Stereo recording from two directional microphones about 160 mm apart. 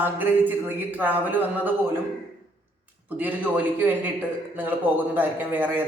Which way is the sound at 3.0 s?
10° right (ahead or behind).